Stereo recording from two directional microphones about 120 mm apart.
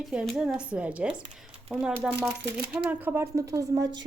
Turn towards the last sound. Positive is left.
turn(degrees=-35)  # may be behind; listen again after turning